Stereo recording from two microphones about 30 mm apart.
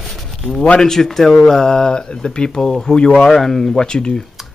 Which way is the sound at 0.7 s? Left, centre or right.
Centre.